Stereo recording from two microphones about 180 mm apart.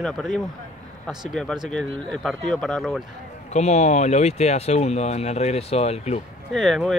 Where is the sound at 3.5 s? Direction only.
40° left (ahead or behind).